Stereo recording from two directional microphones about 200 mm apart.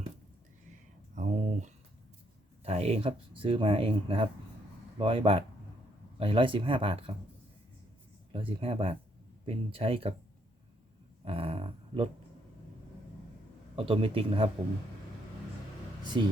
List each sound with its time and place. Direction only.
1.1 s a sound: 35° right (ahead or behind)
2.6 s speech: 30° right (ahead or behind)
8.3 s speech: 25° right (ahead or behind)
11.3 s speech: 30° right (ahead or behind)
13.7 s speech: 25° right (ahead or behind)